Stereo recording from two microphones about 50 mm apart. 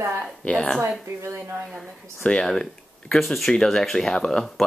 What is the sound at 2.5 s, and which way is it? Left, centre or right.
Speech, centre.